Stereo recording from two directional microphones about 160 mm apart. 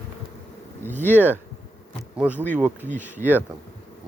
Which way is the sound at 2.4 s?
50° right (ahead or behind).